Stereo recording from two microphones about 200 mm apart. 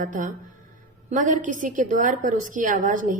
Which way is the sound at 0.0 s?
40° right (ahead or behind).